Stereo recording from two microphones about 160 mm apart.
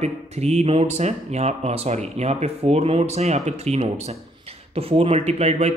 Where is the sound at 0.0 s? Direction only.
40° right (ahead or behind).